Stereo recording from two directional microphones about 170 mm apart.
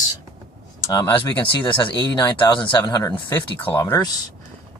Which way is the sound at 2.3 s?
30° left (ahead or behind).